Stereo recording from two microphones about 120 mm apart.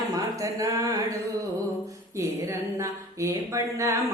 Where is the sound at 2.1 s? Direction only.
25° right (ahead or behind).